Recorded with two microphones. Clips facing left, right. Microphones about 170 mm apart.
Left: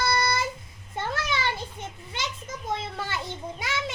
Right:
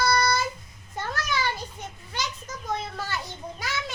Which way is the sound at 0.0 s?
25° left (ahead or behind).